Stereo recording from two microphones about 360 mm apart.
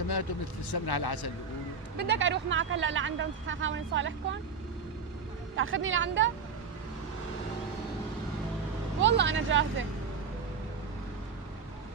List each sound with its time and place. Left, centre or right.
0.7 s speech: left
2.0 s speech: right
5.5 s speech: right
9.0 s speech: right